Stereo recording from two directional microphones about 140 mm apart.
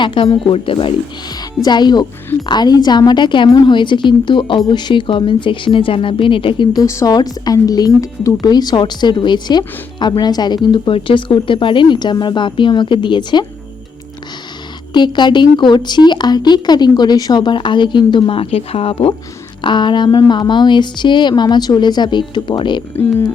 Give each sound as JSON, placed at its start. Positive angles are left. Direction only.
{"t": 0.0, "sound": "speech", "side_deg": 35}
{"t": 6.8, "sound": "speech", "side_deg": 25}
{"t": 14.9, "sound": "speech", "side_deg": 35}
{"t": 23.0, "sound": "speech", "side_deg": 15}